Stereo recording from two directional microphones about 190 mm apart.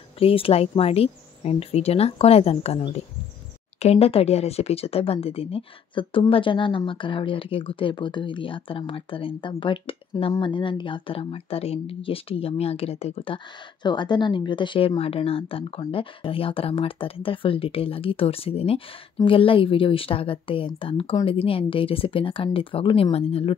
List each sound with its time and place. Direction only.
0.2 s speech: 30° left (ahead or behind)